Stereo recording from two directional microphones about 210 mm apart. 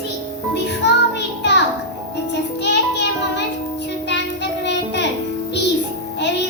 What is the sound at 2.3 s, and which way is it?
Music, 55° left (ahead or behind).